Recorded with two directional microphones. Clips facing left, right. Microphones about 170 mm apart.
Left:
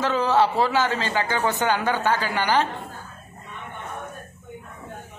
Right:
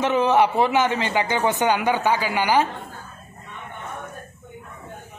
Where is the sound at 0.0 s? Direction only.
20° right (ahead or behind).